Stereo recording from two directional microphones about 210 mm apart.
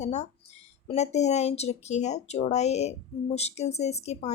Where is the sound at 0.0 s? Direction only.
35° left (ahead or behind).